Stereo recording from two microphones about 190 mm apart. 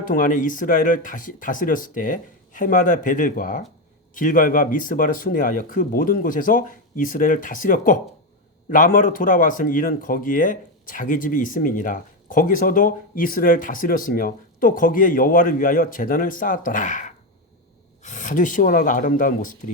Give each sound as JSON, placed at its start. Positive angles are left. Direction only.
{"t": 0.1, "sound": "speech", "side_deg": 45}